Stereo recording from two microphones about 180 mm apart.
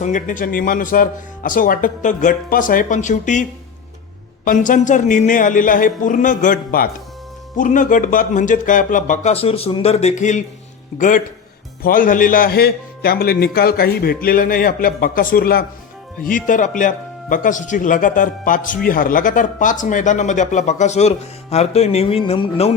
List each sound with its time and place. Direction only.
0.0 s speech: 45° left (ahead or behind)
4.4 s a man's voice: 45° left (ahead or behind)
21.5 s music: 35° left (ahead or behind)